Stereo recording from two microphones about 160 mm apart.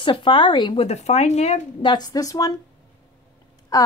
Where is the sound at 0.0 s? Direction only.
30° left (ahead or behind).